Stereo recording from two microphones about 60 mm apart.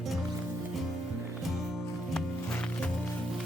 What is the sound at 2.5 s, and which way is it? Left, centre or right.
Music, centre.